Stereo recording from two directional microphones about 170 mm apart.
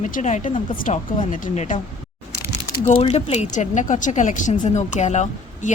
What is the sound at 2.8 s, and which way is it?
A woman's voice, 35° left (ahead or behind).